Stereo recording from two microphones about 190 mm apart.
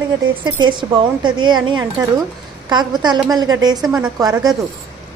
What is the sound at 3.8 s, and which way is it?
Speech, 5° right (ahead or behind).